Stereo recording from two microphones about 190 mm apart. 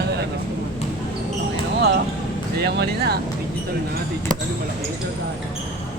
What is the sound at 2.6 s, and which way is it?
Speech, 60° right (ahead or behind).